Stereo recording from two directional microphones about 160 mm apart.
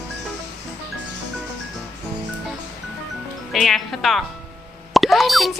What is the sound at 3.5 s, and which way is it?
A woman's voice, centre (ahead or behind).